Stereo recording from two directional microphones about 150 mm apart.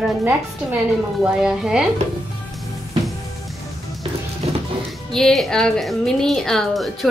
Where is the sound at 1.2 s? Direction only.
5° right (ahead or behind).